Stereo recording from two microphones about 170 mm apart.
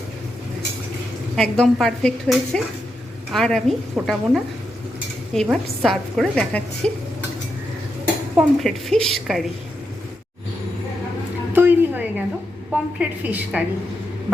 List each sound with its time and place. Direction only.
1.4 s a woman's voice: 5° left (ahead or behind)
5.3 s a woman's voice: 5° left (ahead or behind)
8.4 s a woman's voice: 5° left (ahead or behind)
11.5 s a sound: 10° right (ahead or behind)
12.7 s a woman's voice: 10° right (ahead or behind)